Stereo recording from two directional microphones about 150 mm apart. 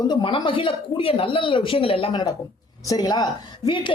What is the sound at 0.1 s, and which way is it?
A woman's voice, 30° left (ahead or behind).